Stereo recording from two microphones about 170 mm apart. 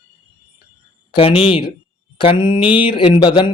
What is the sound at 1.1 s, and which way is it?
Speech, 30° left (ahead or behind).